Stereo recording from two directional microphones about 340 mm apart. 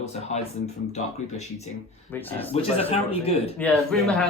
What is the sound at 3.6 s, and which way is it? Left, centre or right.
Speech, centre.